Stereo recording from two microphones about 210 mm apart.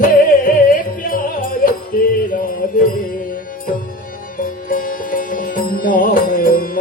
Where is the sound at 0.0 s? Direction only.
40° left (ahead or behind).